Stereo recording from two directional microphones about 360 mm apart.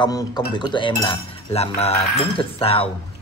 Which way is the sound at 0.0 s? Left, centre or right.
Centre.